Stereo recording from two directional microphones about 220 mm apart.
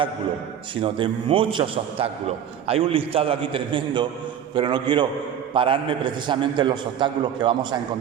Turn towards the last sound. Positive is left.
turn(degrees=-20)  # may be behind; listen again after turning